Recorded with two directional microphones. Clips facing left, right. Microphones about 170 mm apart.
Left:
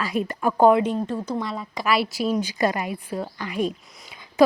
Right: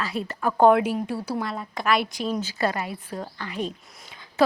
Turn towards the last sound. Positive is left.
turn(degrees=10)  # may be behind; listen again after turning